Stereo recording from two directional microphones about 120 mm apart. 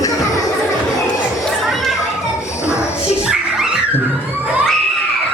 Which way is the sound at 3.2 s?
5° right (ahead or behind).